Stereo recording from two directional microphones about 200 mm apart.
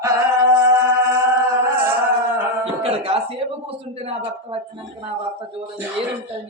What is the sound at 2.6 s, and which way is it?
Speech, 30° right (ahead or behind).